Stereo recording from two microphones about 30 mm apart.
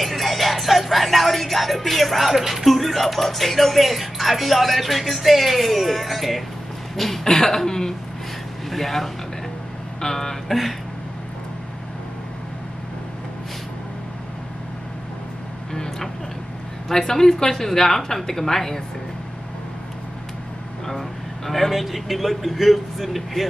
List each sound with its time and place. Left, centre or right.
0.0 s a woman's voice: centre
9.9 s speech: left
15.7 s vehicle: centre
16.9 s a woman's voice: centre
21.5 s a woman's voice: centre